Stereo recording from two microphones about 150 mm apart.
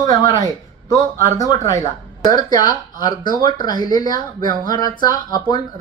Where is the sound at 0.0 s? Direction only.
25° left (ahead or behind).